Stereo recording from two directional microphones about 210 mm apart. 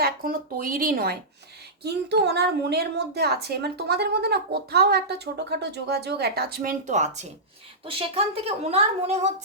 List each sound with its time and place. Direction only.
0.0 s a woman's voice: 45° right (ahead or behind)